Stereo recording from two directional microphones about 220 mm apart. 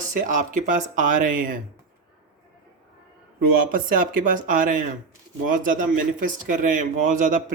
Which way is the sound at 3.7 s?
40° right (ahead or behind).